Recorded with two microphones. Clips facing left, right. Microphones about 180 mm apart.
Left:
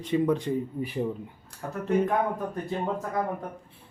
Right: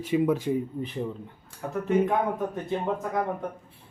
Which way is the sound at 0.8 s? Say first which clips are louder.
Left 2 dB; 10° left (ahead or behind).